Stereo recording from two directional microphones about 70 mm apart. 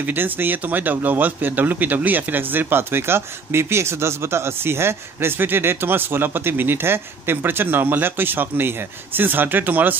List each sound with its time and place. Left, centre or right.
0.0 s speech: right